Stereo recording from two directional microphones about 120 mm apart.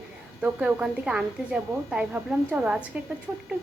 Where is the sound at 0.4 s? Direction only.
10° right (ahead or behind).